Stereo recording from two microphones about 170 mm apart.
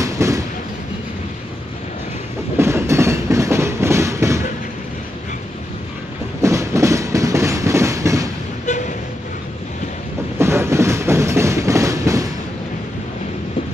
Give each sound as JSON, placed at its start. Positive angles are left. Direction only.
{"t": 0.0, "sound": "train", "side_deg": -20}
{"t": 2.5, "sound": "train", "side_deg": -15}
{"t": 6.4, "sound": "train", "side_deg": -15}
{"t": 8.6, "sound": "vehicle", "side_deg": 45}
{"t": 10.4, "sound": "train", "side_deg": -15}